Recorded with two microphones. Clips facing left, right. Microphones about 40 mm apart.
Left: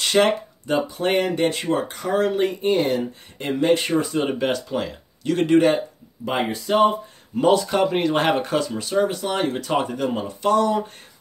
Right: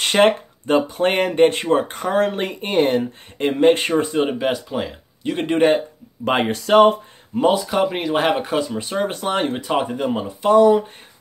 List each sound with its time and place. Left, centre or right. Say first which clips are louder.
0.0 s speech: right 3 dB; right
3.9 s speech: right 3 dB; right
4.3 s speech: right 1 dB; centre
5.2 s speech: left 3 dB; right
6.2 s speech: right 4 dB; right
7.3 s speech: even; centre
7.7 s speech: even; centre
8.7 s speech: left 2 dB; right
9.0 s speech: right 1 dB; right
9.6 s speech: right 1 dB; centre